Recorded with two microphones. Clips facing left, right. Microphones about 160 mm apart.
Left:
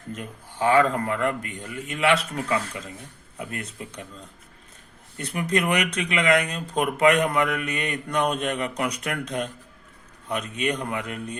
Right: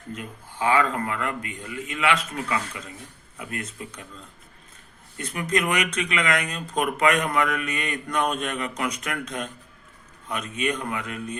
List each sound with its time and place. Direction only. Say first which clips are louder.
0.2 s a man's voice: left 3 dB; 35° left (ahead or behind)
5.1 s speech: left 1 dB; 30° left (ahead or behind)